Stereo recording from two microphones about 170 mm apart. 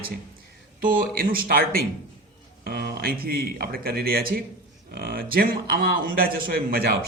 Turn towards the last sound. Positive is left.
turn(degrees=-60)  # may be behind; listen again after turning